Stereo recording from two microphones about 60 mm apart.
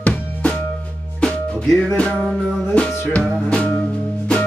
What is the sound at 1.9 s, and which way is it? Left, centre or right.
Music, centre.